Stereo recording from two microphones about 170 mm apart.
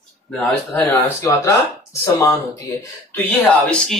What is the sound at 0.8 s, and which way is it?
Speech, 20° left (ahead or behind).